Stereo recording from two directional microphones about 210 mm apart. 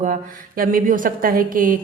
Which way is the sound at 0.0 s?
40° right (ahead or behind).